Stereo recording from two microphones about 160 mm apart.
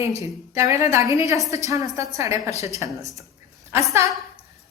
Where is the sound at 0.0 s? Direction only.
20° right (ahead or behind).